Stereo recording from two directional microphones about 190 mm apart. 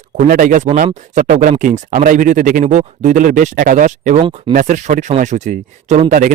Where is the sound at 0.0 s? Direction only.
40° right (ahead or behind).